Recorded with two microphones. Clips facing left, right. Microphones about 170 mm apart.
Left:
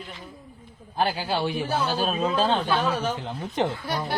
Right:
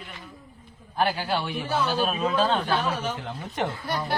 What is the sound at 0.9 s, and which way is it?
A man's voice, 30° left (ahead or behind).